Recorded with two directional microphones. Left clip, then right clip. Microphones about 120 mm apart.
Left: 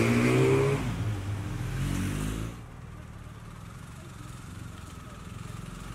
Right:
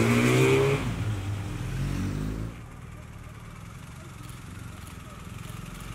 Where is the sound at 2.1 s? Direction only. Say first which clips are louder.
Even; 45° left (ahead or behind).